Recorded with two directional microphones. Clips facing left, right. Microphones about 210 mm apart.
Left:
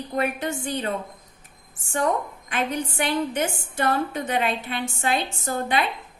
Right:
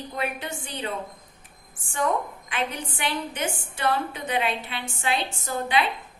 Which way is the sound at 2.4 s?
45° left (ahead or behind).